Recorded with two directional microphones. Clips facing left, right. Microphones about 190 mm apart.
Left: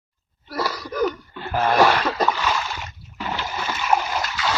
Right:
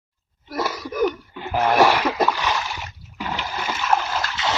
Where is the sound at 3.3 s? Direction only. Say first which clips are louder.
Even; 15° right (ahead or behind).